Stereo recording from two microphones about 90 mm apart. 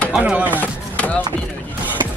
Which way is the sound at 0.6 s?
15° left (ahead or behind).